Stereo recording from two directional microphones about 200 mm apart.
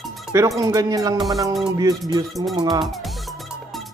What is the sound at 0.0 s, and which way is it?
Music, centre (ahead or behind).